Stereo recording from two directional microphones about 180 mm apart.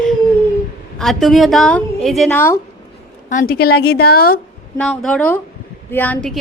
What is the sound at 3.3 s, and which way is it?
A woman's voice, 50° left (ahead or behind).